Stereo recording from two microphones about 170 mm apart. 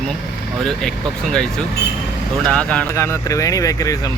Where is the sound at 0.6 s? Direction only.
5° left (ahead or behind).